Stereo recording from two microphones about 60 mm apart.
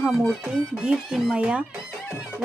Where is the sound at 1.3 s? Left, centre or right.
Centre.